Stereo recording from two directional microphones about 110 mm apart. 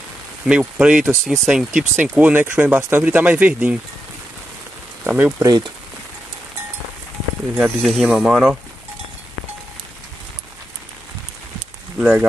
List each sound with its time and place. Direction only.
0.5 s speech: 10° right (ahead or behind)
5.0 s speech: 15° right (ahead or behind)
5.4 s speech: 40° right (ahead or behind)
7.5 s speech: centre (ahead or behind)
12.0 s speech: 10° right (ahead or behind)